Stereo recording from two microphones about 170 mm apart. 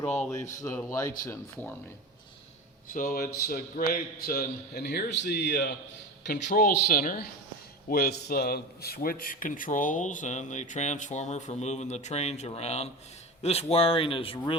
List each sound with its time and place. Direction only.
0.6 s speech: 15° left (ahead or behind)
2.9 s a man's voice: 55° left (ahead or behind); by 5.7 s 85° left
6.3 s a man's voice: 65° left (ahead or behind); by 14.3 s 30° left (ahead or behind)